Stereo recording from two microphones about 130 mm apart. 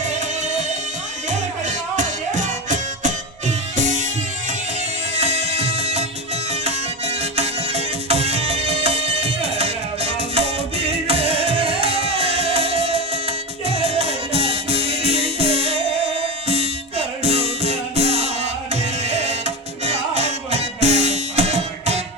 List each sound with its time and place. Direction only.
0.0 s music: 65° right (ahead or behind)
5.1 s music: 55° right (ahead or behind)
18.7 s tabla: 55° right (ahead or behind)